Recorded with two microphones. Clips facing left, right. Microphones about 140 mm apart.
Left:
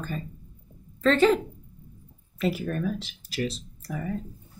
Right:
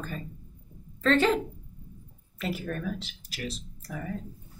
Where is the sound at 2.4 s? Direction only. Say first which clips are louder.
Left 5 dB; centre (ahead or behind).